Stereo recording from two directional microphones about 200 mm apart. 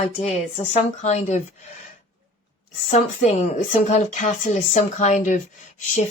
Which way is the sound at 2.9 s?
35° left (ahead or behind).